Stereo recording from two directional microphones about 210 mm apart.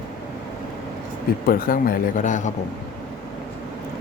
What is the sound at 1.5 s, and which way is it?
Speech, 45° left (ahead or behind).